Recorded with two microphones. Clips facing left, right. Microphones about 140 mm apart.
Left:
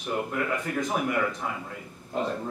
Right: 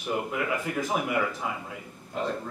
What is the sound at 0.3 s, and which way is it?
Speech, 5° right (ahead or behind).